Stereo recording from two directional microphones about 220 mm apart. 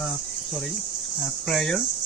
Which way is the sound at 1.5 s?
Centre (ahead or behind).